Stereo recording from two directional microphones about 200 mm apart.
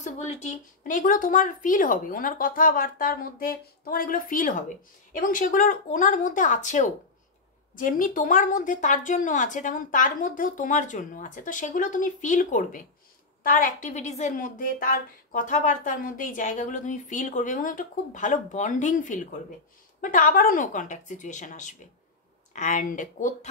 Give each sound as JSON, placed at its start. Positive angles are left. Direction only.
{"t": 0.0, "sound": "a woman's voice", "side_deg": 35}